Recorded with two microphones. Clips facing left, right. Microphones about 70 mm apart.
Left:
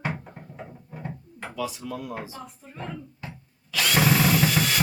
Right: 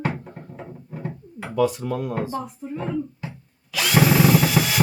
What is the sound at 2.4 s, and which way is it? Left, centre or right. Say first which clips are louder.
Speech: right 8 dB; centre.